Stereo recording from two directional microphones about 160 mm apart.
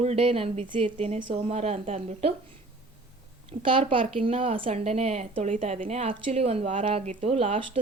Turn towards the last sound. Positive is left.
turn(degrees=-35)  # may be behind; listen again after turning